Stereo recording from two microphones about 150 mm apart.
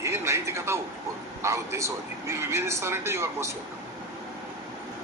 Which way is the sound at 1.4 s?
20° right (ahead or behind).